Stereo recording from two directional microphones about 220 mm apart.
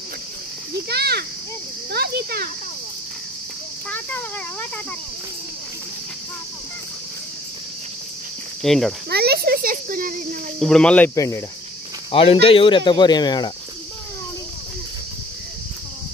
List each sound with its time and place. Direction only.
0.8 s a child's voice: 45° right (ahead or behind)
3.9 s speech: 10° left (ahead or behind)
8.6 s speech: centre (ahead or behind)
9.1 s speech: 45° right (ahead or behind)
10.6 s speech: 5° left (ahead or behind)
12.1 s speech: 25° left (ahead or behind)